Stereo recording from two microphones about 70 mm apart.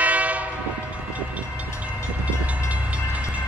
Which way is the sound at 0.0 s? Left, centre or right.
Right.